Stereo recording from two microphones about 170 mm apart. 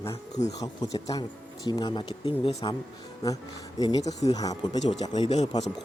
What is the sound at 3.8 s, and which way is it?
Speech, 25° left (ahead or behind).